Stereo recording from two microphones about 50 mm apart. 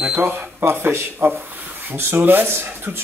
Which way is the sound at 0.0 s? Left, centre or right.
Right.